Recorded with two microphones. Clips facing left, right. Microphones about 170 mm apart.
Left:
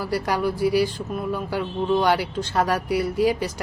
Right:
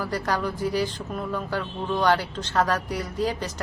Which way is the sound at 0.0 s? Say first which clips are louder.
Left 3 dB; 10° left (ahead or behind).